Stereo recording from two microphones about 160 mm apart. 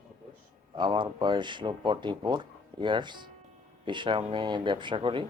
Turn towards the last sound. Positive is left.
turn(degrees=-30)  # may be behind; listen again after turning